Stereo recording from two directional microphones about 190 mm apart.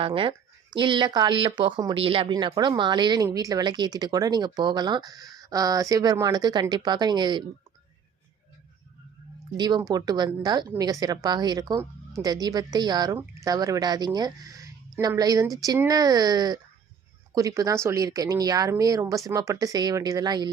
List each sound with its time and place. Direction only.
0.0 s speech: 30° right (ahead or behind)
9.6 s speech: 20° right (ahead or behind)